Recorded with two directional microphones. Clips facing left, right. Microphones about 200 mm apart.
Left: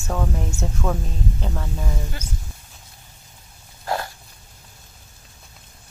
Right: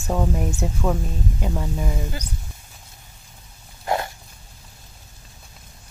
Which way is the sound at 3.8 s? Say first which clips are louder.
Right 2 dB; 20° right (ahead or behind).